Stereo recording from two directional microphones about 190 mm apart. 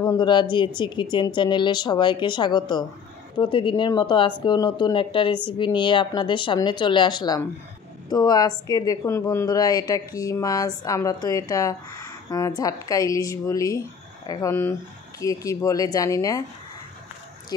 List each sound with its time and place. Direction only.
0.1 s a woman's voice: 25° left (ahead or behind)